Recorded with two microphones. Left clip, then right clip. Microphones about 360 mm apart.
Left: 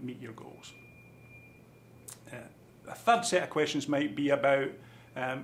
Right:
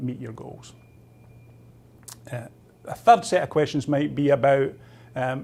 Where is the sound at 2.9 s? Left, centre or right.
Right.